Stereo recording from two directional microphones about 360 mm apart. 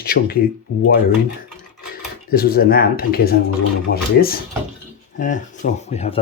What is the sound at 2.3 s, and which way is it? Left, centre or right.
Speech, left.